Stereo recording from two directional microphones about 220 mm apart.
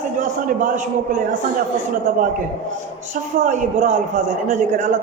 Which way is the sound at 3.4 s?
35° right (ahead or behind).